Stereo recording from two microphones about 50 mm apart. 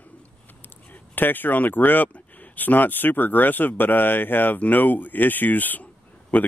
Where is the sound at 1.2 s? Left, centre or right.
Left.